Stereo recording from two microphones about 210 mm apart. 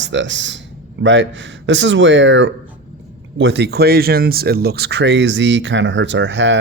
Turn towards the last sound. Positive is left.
turn(degrees=-60)  # may be behind; listen again after turning